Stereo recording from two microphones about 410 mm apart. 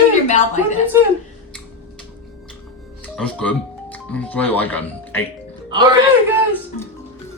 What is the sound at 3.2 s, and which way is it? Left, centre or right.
Speech, centre.